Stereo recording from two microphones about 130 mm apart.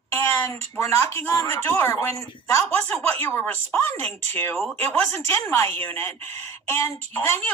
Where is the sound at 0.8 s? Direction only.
20° left (ahead or behind).